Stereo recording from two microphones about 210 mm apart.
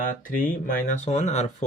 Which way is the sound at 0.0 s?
40° left (ahead or behind).